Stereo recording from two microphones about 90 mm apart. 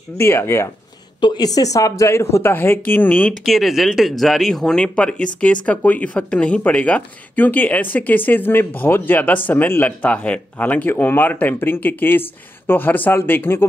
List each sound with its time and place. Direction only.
0.2 s speech: 30° left (ahead or behind)
1.2 s speech: 50° left (ahead or behind); by 3.3 s 20° left (ahead or behind)
3.4 s speech: centre (ahead or behind); by 13.7 s 25° left (ahead or behind)